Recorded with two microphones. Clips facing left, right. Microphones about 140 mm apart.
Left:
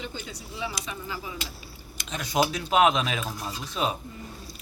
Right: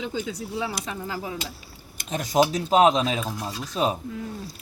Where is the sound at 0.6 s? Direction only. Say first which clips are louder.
Right 1 dB; 60° right (ahead or behind).